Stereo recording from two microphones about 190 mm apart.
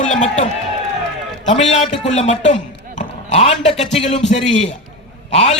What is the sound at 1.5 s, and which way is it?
Speech, 30° left (ahead or behind).